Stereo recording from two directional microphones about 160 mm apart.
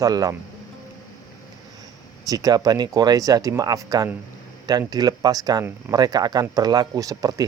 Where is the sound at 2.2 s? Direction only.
25° right (ahead or behind).